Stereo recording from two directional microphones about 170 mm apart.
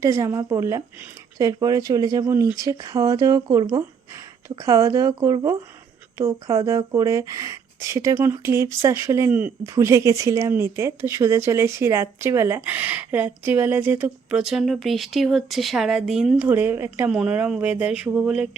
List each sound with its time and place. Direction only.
0.0 s speech: 15° right (ahead or behind)